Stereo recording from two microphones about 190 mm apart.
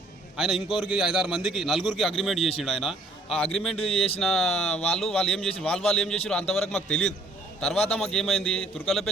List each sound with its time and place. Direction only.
0.3 s a man's voice: centre (ahead or behind)
3.9 s speech: 30° left (ahead or behind)
4.2 s speech: centre (ahead or behind)